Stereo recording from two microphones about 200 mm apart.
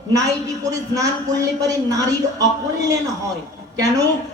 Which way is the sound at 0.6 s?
15° right (ahead or behind).